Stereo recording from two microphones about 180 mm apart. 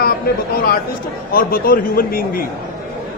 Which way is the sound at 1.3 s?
55° left (ahead or behind).